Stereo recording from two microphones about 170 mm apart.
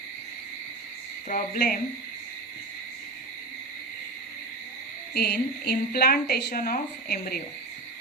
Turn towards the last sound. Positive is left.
turn(degrees=55)  # may be behind; listen again after turning